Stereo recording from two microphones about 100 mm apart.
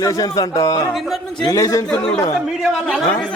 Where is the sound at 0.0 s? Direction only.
35° left (ahead or behind).